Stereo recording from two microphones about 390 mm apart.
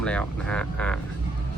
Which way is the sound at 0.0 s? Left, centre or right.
Centre.